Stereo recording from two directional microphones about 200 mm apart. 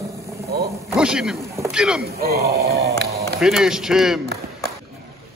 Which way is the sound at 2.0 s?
50° right (ahead or behind).